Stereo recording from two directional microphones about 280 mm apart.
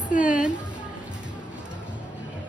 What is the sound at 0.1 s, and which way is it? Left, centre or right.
Music, left.